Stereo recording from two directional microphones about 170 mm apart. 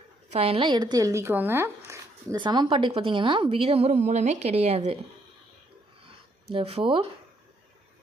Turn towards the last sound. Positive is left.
turn(degrees=-30)  # may be behind; listen again after turning